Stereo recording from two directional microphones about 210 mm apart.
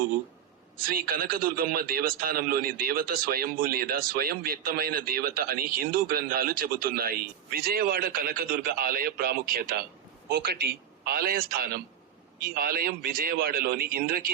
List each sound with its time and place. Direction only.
0.8 s a man's voice: 45° right (ahead or behind)